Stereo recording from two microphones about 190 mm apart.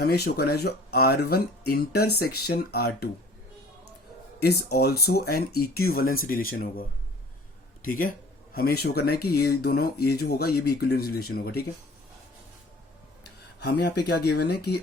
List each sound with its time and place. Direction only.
0.0 s speech: 55° left (ahead or behind)
4.4 s speech: 55° left (ahead or behind)
13.6 s speech: 60° left (ahead or behind)